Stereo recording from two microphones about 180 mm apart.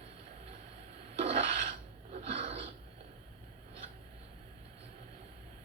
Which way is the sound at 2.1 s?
35° right (ahead or behind).